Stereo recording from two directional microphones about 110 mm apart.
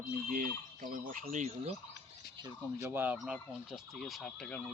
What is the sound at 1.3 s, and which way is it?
Speech, 90° right.